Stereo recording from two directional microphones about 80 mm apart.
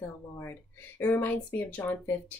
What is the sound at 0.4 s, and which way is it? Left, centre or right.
Speech, left.